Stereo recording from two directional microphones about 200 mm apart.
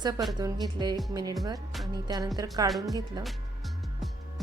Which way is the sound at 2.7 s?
Centre (ahead or behind).